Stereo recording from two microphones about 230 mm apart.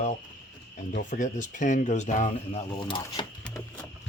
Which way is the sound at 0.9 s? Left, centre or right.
Left.